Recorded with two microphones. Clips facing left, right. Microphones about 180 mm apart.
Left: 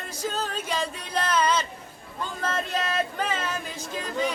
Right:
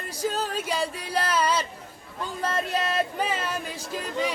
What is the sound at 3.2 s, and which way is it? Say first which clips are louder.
Music: right 1 dB; 10° right (ahead or behind).